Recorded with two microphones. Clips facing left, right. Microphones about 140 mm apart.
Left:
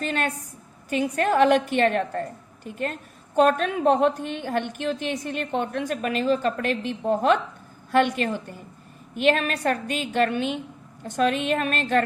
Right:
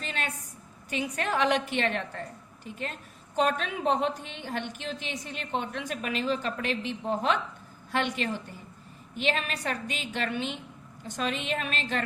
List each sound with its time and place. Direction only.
0.0 s a woman's voice: 50° left (ahead or behind)